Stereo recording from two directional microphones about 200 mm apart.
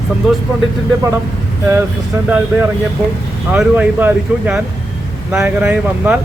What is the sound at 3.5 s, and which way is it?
Speech, 10° right (ahead or behind).